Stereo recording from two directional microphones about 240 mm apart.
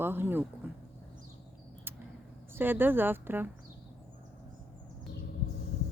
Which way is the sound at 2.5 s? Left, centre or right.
Centre.